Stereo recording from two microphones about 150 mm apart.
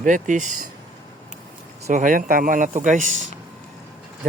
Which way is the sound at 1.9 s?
60° right (ahead or behind).